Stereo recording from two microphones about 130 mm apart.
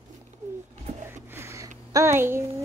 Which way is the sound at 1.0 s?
20° right (ahead or behind).